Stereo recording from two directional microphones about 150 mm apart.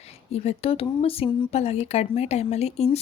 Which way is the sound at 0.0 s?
45° left (ahead or behind).